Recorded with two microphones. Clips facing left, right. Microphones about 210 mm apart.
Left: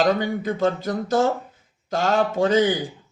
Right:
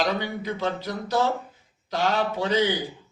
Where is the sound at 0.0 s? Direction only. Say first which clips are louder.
Left 6 dB; 50° left (ahead or behind).